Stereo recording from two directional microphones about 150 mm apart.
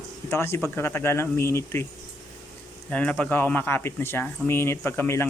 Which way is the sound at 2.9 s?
10° left (ahead or behind).